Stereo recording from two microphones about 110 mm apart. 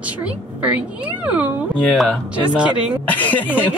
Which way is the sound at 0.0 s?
15° right (ahead or behind).